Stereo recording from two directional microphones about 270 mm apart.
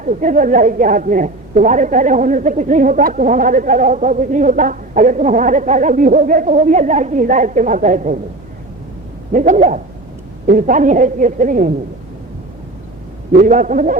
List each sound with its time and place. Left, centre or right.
0.0 s a woman's voice: right
9.3 s a woman's voice: right
13.3 s a woman's voice: right